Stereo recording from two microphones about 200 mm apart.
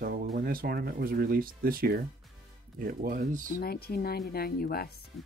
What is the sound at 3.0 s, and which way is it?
Speech, 45° right (ahead or behind).